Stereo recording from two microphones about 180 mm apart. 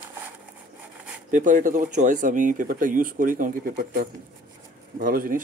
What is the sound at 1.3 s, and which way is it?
Speech, 45° right (ahead or behind).